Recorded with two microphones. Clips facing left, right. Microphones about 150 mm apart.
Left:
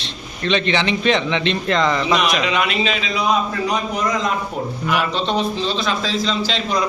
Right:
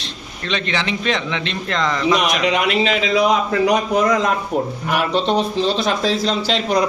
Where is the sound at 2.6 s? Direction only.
70° right (ahead or behind).